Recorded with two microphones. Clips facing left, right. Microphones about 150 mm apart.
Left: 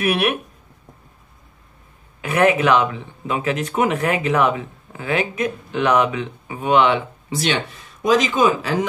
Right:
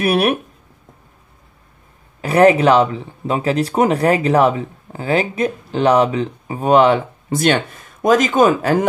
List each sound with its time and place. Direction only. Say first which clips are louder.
0.0 s speech: right 4 dB; 35° right (ahead or behind)
2.2 s speech: right 5 dB; 35° right (ahead or behind); by 8.7 s 50° right (ahead or behind)